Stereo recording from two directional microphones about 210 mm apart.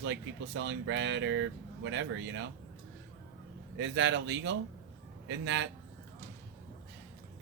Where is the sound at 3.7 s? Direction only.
60° right (ahead or behind).